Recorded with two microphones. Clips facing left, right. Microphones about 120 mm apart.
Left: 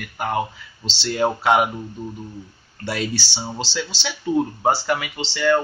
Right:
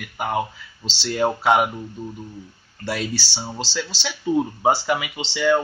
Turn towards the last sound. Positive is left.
turn(degrees=-5)  # may be behind; listen again after turning